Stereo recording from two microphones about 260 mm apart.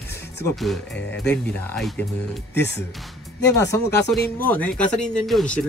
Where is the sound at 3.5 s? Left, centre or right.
Centre.